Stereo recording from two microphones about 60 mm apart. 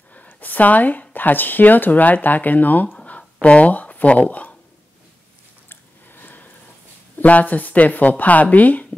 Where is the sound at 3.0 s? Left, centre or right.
Left.